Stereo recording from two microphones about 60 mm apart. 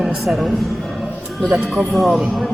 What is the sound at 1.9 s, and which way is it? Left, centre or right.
Speech, centre.